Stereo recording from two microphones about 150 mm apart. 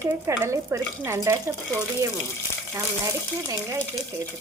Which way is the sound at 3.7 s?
20° right (ahead or behind).